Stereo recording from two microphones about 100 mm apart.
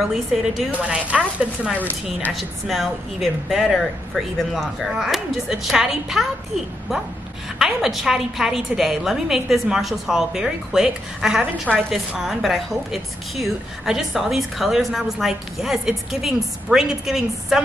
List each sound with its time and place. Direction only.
0.3 s a woman's voice: 5° right (ahead or behind)
1.8 s speech: 15° left (ahead or behind)
2.3 s a woman's voice: centre (ahead or behind)
7.5 s a woman's voice: centre (ahead or behind)